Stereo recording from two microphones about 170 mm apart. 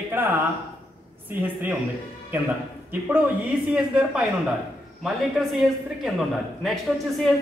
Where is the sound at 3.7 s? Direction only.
5° right (ahead or behind).